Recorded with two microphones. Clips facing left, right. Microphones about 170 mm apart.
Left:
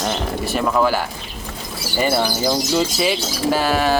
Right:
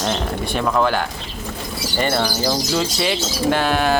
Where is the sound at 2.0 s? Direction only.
5° left (ahead or behind).